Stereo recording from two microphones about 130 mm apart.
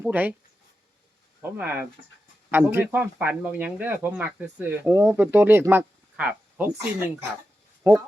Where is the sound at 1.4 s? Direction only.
15° right (ahead or behind).